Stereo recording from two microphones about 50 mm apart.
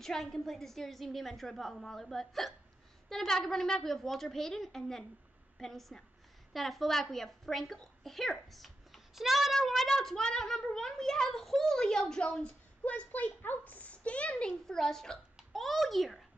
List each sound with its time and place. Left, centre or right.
0.0 s a child's voice: centre; by 13.3 s left
13.4 s a child's voice: left
14.7 s a child's voice: centre